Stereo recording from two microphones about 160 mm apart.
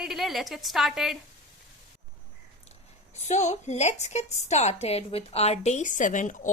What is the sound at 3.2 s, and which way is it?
A woman's voice, 45° left (ahead or behind).